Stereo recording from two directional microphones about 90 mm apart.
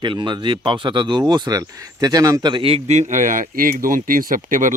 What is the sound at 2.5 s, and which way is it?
Speech, 90° right.